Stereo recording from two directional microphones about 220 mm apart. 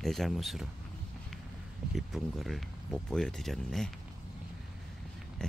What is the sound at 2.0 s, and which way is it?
Speech, centre (ahead or behind).